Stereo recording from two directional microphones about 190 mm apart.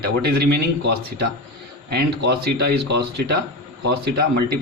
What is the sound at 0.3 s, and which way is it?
Speech, 60° right (ahead or behind).